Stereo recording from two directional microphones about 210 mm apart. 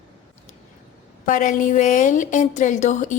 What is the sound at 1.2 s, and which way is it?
A woman's voice, 40° left (ahead or behind).